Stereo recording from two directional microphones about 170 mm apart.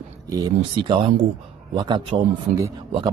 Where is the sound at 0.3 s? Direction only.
25° right (ahead or behind).